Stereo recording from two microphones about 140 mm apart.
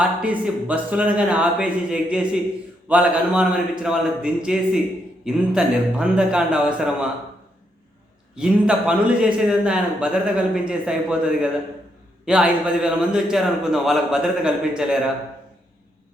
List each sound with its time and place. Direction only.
0.0 s a man's voice: 5° right (ahead or behind)
8.4 s a man's voice: 5° right (ahead or behind)